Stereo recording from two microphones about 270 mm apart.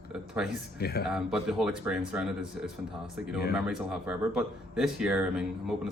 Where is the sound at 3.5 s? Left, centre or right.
Centre.